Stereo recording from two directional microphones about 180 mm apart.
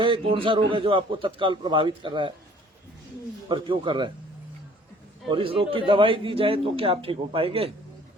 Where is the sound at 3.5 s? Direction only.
25° right (ahead or behind).